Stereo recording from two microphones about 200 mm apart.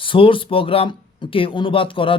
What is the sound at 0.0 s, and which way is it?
Speech, 25° left (ahead or behind).